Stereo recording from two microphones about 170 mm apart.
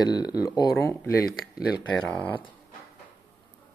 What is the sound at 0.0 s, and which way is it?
Speech, 25° left (ahead or behind).